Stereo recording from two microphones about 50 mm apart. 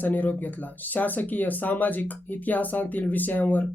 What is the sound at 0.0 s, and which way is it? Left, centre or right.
Speech, left.